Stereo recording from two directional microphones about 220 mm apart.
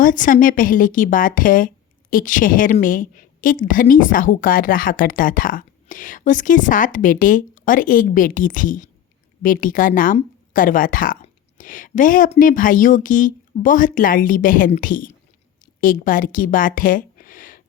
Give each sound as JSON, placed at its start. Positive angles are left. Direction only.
{"t": 0.0, "sound": "a woman's voice", "side_deg": 35}